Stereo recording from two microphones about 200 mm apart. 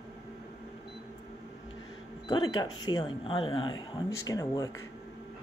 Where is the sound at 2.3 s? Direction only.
20° left (ahead or behind).